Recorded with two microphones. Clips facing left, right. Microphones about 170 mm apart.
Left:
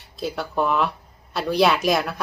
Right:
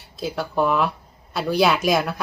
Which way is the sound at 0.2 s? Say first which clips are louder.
Right 2 dB; centre (ahead or behind).